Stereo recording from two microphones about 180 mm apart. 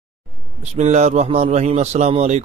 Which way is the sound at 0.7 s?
40° right (ahead or behind).